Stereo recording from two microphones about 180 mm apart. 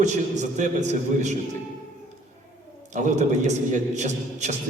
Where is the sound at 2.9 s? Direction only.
40° right (ahead or behind).